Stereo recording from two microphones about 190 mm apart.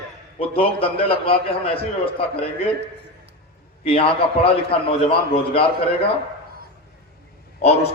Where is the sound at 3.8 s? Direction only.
30° left (ahead or behind).